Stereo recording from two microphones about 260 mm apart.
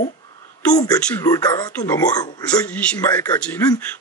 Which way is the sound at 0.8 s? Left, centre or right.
Centre.